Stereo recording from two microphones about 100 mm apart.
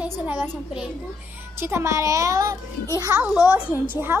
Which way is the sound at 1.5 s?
25° right (ahead or behind).